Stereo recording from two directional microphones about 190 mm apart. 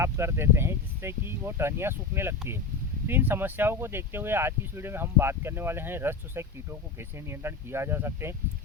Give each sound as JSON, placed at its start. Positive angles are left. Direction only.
{"t": 0.0, "sound": "speech", "side_deg": -15}